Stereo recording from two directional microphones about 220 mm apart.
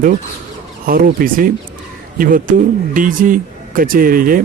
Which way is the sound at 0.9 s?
40° right (ahead or behind).